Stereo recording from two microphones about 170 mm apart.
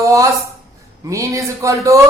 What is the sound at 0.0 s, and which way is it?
A woman's voice, 20° right (ahead or behind).